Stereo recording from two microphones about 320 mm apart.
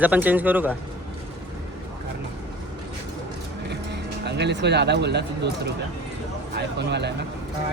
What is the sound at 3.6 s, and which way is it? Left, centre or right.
Speech, right.